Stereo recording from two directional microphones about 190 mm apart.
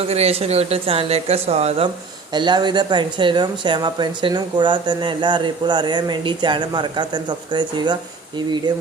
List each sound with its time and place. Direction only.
0.0 s speech: 35° right (ahead or behind)
2.3 s speech: 25° right (ahead or behind)